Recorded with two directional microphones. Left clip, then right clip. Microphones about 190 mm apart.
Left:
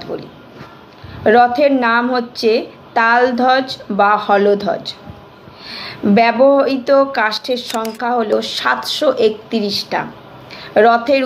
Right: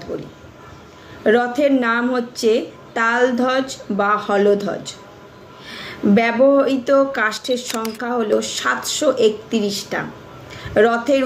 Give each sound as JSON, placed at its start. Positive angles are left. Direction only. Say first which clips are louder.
{"t": 1.2, "sound": "a woman's voice", "louder": "left 5 dB", "side_deg": -15}
{"t": 7.6, "sound": "speech", "louder": "left 4 dB", "side_deg": 0}
{"t": 8.0, "sound": "a woman's voice", "louder": "left 3 dB", "side_deg": -20}